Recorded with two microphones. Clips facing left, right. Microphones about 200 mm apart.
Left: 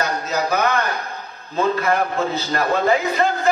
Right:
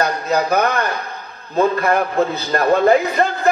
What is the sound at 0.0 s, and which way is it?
A man's voice, 60° right (ahead or behind).